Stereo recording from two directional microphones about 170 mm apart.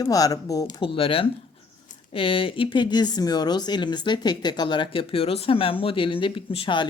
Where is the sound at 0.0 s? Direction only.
20° left (ahead or behind).